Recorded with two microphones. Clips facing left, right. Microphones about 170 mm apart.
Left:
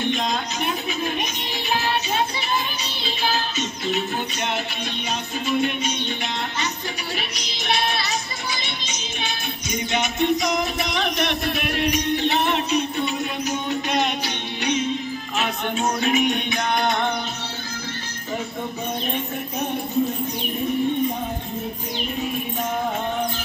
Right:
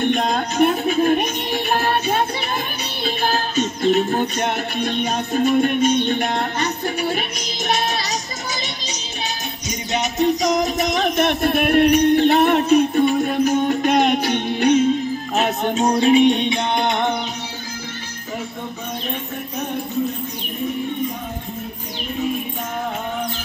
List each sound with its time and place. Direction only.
0.0 s music: 55° right (ahead or behind); by 17.2 s 20° right (ahead or behind)